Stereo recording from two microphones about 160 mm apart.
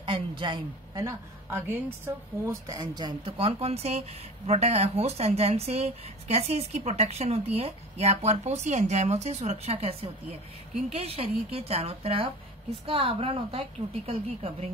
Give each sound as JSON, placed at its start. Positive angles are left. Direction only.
{"t": 0.0, "sound": "a woman's voice", "side_deg": -30}
{"t": 2.4, "sound": "speech", "side_deg": -20}